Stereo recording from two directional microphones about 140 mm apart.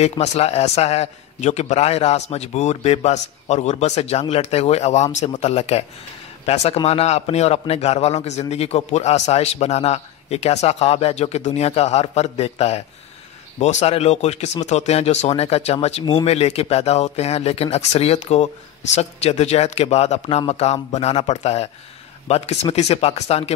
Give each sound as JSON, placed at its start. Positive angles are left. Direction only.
{"t": 0.0, "sound": "a man's voice", "side_deg": 50}